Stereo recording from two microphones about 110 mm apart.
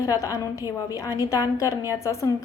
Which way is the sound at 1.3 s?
30° left (ahead or behind).